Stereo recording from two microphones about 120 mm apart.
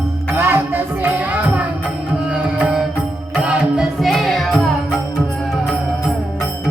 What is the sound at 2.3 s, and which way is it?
Music, 10° right (ahead or behind).